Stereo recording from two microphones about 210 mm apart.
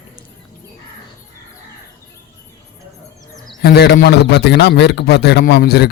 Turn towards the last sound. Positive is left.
turn(degrees=50)  # may be behind; listen again after turning